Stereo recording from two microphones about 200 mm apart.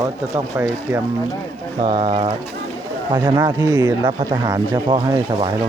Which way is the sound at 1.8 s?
25° right (ahead or behind).